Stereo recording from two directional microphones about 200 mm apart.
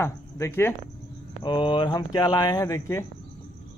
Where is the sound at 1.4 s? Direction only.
25° left (ahead or behind).